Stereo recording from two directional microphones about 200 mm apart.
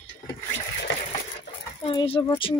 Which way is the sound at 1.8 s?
25° left (ahead or behind).